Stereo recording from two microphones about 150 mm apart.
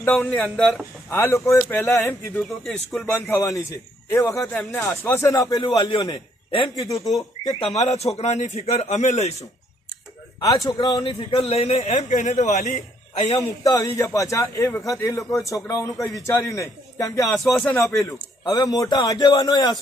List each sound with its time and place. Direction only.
0.0 s a man's voice: 10° left (ahead or behind)
1.1 s a man's voice: 15° left (ahead or behind)
2.3 s speech: 5° left (ahead or behind)
3.2 s a man's voice: 20° left (ahead or behind)
4.4 s a man's voice: 5° left (ahead or behind); by 5.7 s 20° left (ahead or behind)
5.7 s a man's voice: 35° left (ahead or behind)
7.5 s a man's voice: 45° left (ahead or behind)
10.7 s a man's voice: 30° left (ahead or behind)
11.1 s a man's voice: 40° left (ahead or behind)
13.3 s a man's voice: 25° left (ahead or behind)
17.4 s speech: 5° left (ahead or behind)
18.0 s a man's voice: 30° left (ahead or behind)